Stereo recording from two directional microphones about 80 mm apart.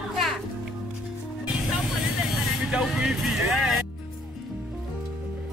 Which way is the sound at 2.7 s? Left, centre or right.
Centre.